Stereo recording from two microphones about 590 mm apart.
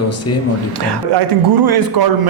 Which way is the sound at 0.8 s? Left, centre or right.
Right.